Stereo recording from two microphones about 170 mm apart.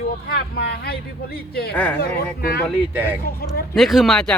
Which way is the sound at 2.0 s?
65° left (ahead or behind).